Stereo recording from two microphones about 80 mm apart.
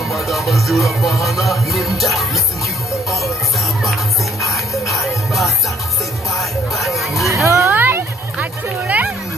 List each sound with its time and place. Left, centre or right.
0.1 s music: centre
7.4 s a sound: right
7.7 s music: right